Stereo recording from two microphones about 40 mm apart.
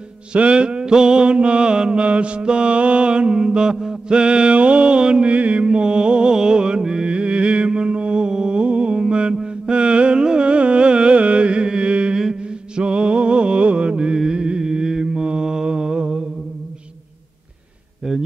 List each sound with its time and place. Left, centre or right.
0.3 s mantra: right
4.2 s mantra: right
18.1 s a sound: centre